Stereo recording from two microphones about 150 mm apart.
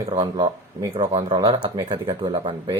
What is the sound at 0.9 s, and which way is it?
Speech, 35° right (ahead or behind).